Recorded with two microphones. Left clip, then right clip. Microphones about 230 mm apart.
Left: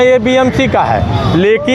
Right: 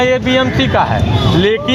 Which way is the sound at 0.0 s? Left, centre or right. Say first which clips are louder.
Left 4 dB; left.